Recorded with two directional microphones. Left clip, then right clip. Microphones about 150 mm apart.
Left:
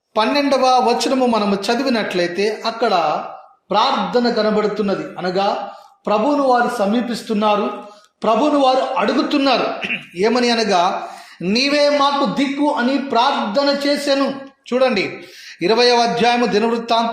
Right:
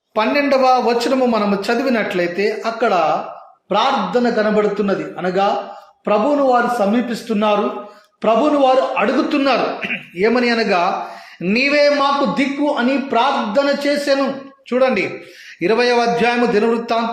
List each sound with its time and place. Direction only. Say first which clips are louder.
0.1 s a man's voice: right 1 dB; 30° left (ahead or behind)